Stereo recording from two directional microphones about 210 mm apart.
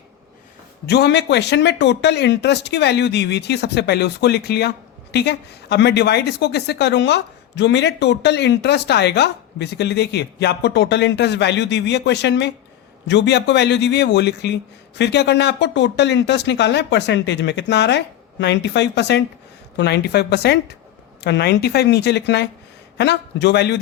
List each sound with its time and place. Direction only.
0.9 s a man's voice: 50° left (ahead or behind)